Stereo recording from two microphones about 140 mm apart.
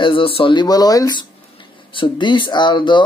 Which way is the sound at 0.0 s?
40° left (ahead or behind).